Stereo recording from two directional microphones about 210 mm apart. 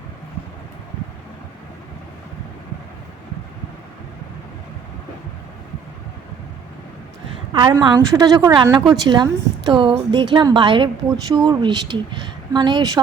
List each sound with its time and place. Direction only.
7.5 s a woman's voice: 20° right (ahead or behind)